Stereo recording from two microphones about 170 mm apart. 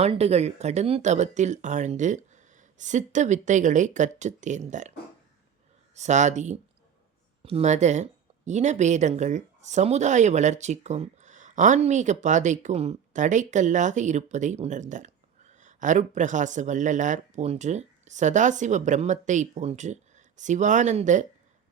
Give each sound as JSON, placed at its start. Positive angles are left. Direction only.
{"t": 0.0, "sound": "speech", "side_deg": -40}
{"t": 5.9, "sound": "speech", "side_deg": -45}